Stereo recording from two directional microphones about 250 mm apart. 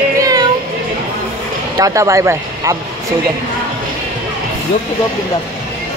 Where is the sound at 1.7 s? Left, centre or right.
Centre.